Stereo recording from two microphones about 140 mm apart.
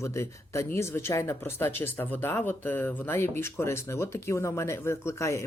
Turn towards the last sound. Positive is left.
turn(degrees=20)  # may be behind; listen again after turning